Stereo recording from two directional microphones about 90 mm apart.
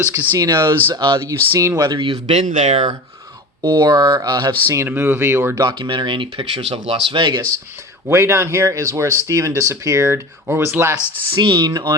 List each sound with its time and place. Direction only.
0.1 s speech: 20° right (ahead or behind)
0.9 s speech: 60° right (ahead or behind)
1.3 s speech: 35° right (ahead or behind)
1.9 s speech: 80° right
2.2 s speech: 90° right
3.6 s speech: 55° right (ahead or behind)
3.8 s speech: 40° right (ahead or behind)
4.9 s speech: 25° right (ahead or behind)
5.5 s speech: 50° right (ahead or behind)
8.0 s speech: 30° right (ahead or behind)
11.3 s speech: 65° right (ahead or behind)
11.6 s speech: 45° right (ahead or behind)